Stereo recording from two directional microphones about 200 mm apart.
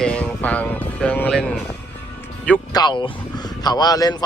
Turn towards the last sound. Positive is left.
turn(degrees=20)  # may be behind; listen again after turning